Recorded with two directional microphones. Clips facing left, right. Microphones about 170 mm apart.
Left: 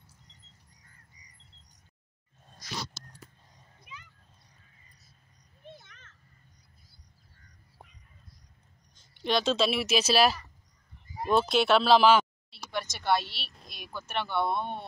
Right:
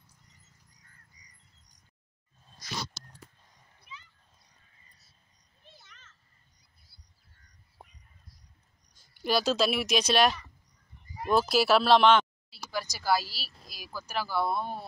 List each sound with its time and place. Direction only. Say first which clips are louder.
5.7 s children playing: left 9 dB; 55° left (ahead or behind)
9.1 s speech: even; 5° right (ahead or behind)